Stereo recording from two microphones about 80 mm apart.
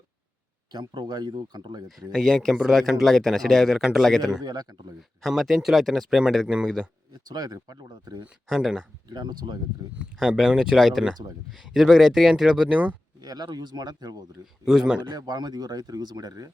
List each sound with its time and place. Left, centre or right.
0.7 s speech: right
2.1 s speech: centre
4.2 s speech: right
5.2 s a man's voice: centre
7.1 s speech: right
8.4 s speech: centre
9.0 s speech: right
10.0 s speech: centre
13.2 s speech: right
14.6 s a man's voice: centre
15.1 s speech: right